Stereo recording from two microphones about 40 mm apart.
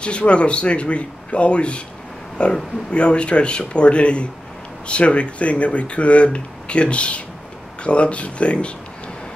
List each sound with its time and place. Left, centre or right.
0.0 s speech: left